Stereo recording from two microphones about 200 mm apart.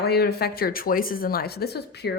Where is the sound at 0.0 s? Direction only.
50° left (ahead or behind).